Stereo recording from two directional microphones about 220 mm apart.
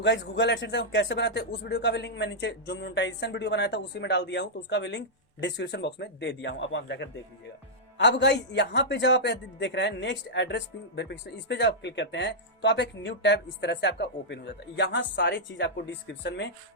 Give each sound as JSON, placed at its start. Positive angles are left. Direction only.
{"t": 0.0, "sound": "a man's voice", "side_deg": 50}